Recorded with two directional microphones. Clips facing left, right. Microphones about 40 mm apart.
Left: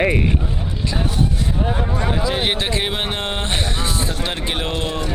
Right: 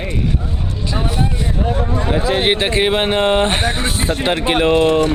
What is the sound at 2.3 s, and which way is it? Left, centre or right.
Speech, centre.